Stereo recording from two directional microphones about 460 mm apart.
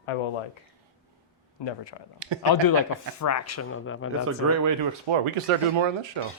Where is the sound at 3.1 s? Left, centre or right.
Left.